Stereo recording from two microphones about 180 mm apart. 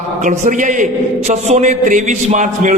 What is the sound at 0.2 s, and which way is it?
A man's voice, 45° right (ahead or behind).